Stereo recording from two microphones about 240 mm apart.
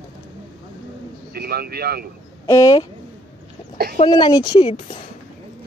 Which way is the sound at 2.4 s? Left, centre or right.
Centre.